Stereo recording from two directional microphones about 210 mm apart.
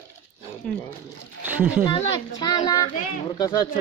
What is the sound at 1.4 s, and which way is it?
Speech, 10° right (ahead or behind).